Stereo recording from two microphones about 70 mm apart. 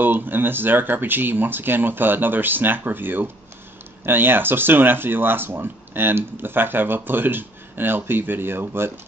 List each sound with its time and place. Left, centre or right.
0.0 s speech: right